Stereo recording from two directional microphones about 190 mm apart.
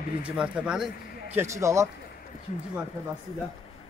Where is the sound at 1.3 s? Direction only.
15° right (ahead or behind).